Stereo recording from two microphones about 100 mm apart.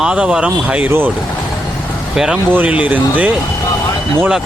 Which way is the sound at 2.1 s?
5° right (ahead or behind).